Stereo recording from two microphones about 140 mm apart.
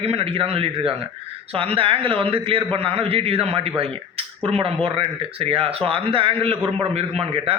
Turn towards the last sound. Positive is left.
turn(degrees=-45)  # may be behind; listen again after turning